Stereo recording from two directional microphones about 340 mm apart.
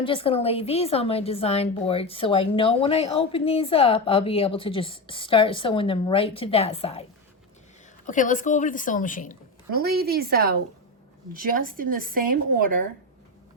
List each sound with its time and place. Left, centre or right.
0.0 s a woman's voice: centre
8.0 s a woman's voice: left
9.7 s speech: right